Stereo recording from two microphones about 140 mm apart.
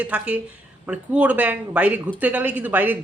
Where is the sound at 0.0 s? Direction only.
10° right (ahead or behind).